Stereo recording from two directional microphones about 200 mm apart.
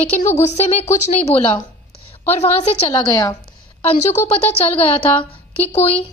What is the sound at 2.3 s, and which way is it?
Speech, 30° left (ahead or behind).